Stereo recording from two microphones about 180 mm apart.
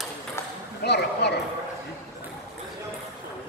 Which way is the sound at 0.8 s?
70° left (ahead or behind).